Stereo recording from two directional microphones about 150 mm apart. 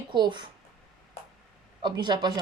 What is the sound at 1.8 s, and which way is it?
Speech, 30° right (ahead or behind).